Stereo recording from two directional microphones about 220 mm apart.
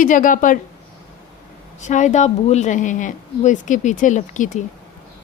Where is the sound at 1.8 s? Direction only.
35° left (ahead or behind).